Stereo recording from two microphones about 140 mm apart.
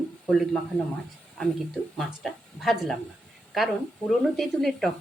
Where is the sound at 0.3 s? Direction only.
Centre (ahead or behind).